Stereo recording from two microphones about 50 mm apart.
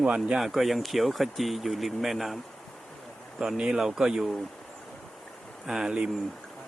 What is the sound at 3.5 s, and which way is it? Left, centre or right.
Speech, centre.